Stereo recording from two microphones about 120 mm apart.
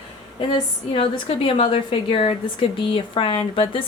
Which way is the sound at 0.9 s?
50° left (ahead or behind).